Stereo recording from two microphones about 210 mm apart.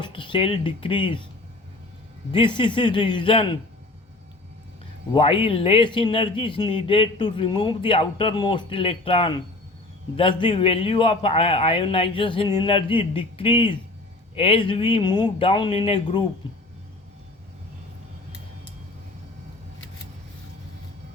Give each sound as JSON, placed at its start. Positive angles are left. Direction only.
{"t": 0.0, "sound": "speech", "side_deg": 25}
{"t": 2.3, "sound": "a man's voice", "side_deg": 25}
{"t": 5.1, "sound": "a man's voice", "side_deg": 25}